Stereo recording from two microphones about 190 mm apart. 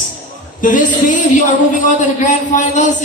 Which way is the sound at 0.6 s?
45° left (ahead or behind).